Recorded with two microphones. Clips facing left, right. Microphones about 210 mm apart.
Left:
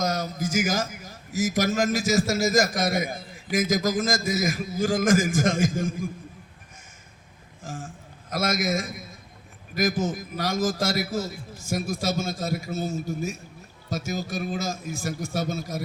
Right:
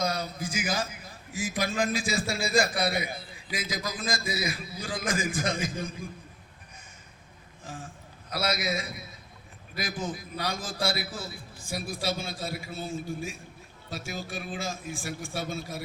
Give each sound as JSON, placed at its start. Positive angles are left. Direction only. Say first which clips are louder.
{"t": 0.0, "sound": "a man's voice", "louder": "left 4 dB", "side_deg": 45}
{"t": 7.6, "sound": "a man's voice", "louder": "left 5 dB", "side_deg": 45}